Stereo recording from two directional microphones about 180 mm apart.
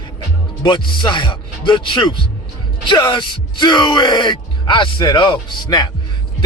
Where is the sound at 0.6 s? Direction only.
25° left (ahead or behind).